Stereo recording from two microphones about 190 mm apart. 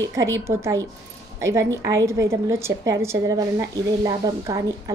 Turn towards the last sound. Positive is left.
turn(degrees=-15)  # may be behind; listen again after turning